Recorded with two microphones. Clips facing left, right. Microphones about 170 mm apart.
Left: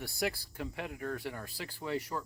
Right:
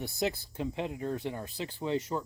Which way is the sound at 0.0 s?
20° right (ahead or behind).